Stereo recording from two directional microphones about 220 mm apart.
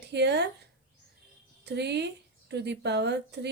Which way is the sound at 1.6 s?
50° right (ahead or behind).